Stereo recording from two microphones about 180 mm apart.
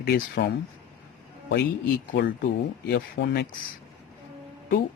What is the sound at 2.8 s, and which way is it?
Speech, 70° left (ahead or behind).